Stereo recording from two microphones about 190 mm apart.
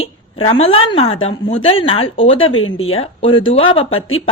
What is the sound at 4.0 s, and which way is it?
Speech, 90° left.